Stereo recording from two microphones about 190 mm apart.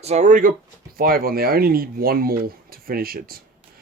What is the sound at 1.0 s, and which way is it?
Speech, 50° right (ahead or behind).